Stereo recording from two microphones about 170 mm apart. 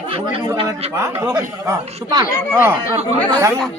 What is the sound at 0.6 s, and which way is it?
Speech, 20° right (ahead or behind).